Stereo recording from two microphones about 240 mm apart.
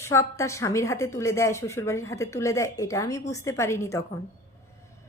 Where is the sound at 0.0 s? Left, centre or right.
Centre.